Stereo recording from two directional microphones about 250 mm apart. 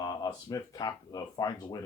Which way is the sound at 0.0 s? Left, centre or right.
Centre.